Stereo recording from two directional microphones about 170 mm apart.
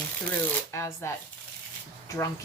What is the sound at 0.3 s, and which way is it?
A woman's voice, 15° left (ahead or behind).